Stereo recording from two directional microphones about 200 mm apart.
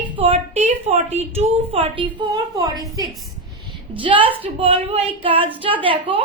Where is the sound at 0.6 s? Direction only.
35° right (ahead or behind).